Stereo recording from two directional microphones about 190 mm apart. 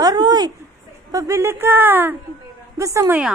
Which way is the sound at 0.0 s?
20° right (ahead or behind).